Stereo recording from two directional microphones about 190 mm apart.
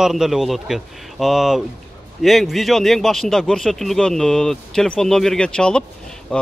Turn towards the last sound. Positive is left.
turn(degrees=5)  # may be behind; listen again after turning